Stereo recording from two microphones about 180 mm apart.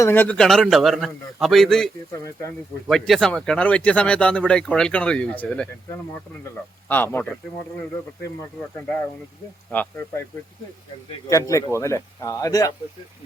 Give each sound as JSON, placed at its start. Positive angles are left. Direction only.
{"t": 0.0, "sound": "speech", "side_deg": 10}
{"t": 2.1, "sound": "speech", "side_deg": 15}
{"t": 2.8, "sound": "speech", "side_deg": 0}
{"t": 6.8, "sound": "speech", "side_deg": 10}
{"t": 11.3, "sound": "speech", "side_deg": 15}